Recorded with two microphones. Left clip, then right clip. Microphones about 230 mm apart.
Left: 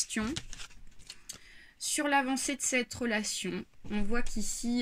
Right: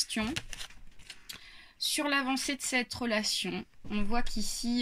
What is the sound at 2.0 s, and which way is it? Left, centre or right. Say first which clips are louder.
Speech: left 4 dB; left.